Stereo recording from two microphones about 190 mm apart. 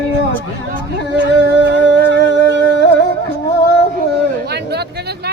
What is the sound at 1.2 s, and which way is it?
Humming, 65° right (ahead or behind).